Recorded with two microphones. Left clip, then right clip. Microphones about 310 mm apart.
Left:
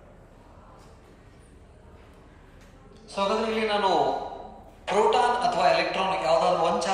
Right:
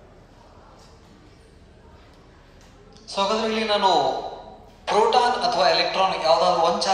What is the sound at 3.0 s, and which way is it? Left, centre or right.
A man's voice, right.